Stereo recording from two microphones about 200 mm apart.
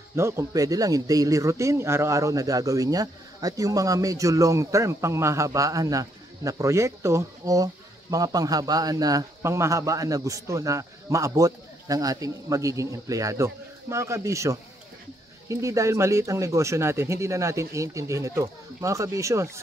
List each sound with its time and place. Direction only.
0.1 s speech: 15° right (ahead or behind)